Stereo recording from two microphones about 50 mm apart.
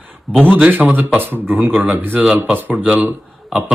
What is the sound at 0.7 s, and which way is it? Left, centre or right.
Speech, right.